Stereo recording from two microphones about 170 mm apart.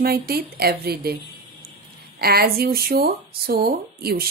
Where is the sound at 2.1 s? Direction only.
65° right (ahead or behind).